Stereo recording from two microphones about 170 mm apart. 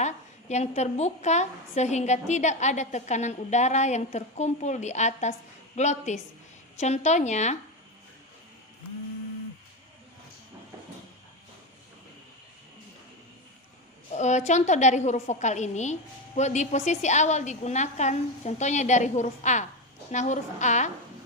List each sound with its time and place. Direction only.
0.0 s a woman's voice: 40° left (ahead or behind)
14.1 s a woman's voice: 45° left (ahead or behind)